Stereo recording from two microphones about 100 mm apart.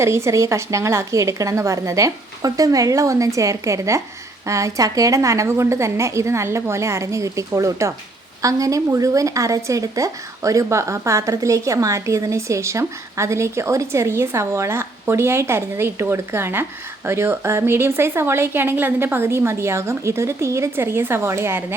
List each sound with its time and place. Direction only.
0.0 s a woman's voice: 25° right (ahead or behind)